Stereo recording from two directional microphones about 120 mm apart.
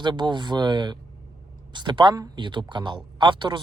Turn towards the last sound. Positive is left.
turn(degrees=-40)  # may be behind; listen again after turning